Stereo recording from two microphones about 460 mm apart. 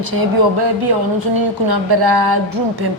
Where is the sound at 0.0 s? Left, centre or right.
Right.